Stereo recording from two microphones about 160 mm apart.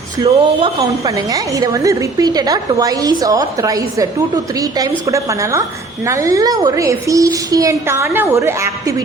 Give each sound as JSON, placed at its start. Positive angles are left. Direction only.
{"t": 0.2, "sound": "a woman's voice", "side_deg": -25}